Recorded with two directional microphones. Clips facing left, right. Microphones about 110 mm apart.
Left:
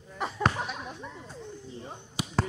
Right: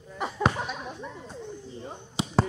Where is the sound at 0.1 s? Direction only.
Centre (ahead or behind).